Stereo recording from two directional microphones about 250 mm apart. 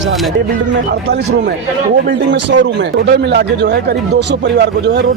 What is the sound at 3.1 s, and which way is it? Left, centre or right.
Speech, right.